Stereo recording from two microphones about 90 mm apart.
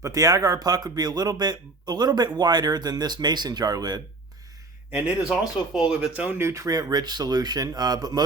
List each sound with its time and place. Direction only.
0.0 s a man's voice: 40° right (ahead or behind)
4.9 s speech: 10° right (ahead or behind)
6.4 s a man's voice: 35° right (ahead or behind)